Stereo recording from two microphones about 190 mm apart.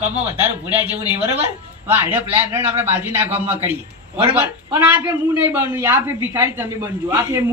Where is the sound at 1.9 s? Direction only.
10° right (ahead or behind).